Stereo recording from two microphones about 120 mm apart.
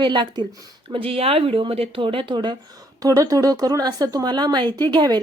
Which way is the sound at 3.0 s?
30° right (ahead or behind).